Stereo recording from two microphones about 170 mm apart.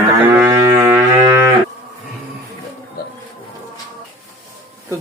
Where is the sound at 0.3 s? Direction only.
15° right (ahead or behind).